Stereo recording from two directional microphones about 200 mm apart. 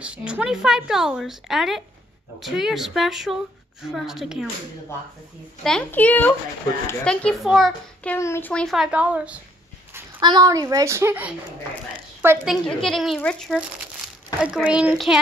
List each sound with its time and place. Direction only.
0.0 s a child's voice: 5° right (ahead or behind)
5.6 s a child's voice: 5° left (ahead or behind)
10.2 s a woman's voice: 20° right (ahead or behind)
12.4 s a child's voice: centre (ahead or behind)